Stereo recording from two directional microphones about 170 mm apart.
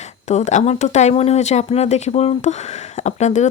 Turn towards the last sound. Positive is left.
turn(degrees=45)  # may be behind; listen again after turning